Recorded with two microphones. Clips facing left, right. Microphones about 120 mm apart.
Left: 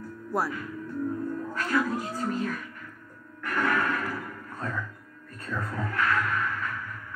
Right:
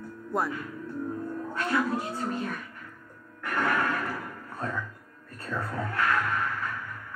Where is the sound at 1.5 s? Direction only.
30° right (ahead or behind).